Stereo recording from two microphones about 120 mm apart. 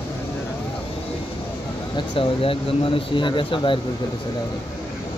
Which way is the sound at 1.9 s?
50° left (ahead or behind).